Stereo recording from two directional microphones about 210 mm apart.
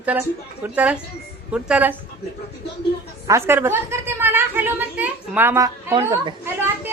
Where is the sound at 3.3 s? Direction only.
10° right (ahead or behind).